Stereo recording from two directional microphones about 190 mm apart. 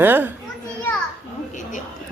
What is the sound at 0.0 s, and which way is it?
Speech, 10° right (ahead or behind).